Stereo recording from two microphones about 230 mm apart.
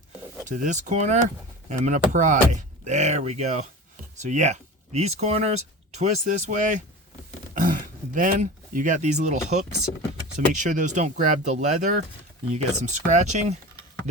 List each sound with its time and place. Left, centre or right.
0.4 s speech: right
7.5 s throat clearing: right
10.3 s speech: right